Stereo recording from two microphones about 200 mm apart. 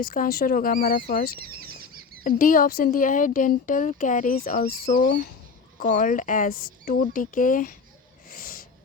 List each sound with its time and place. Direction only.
0.0 s speech: 45° left (ahead or behind)
2.2 s speech: 45° left (ahead or behind)
8.3 s a sound: 45° left (ahead or behind)